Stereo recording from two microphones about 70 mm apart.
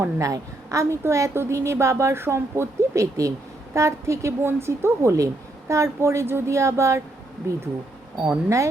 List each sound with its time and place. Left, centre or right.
0.0 s a woman's voice: right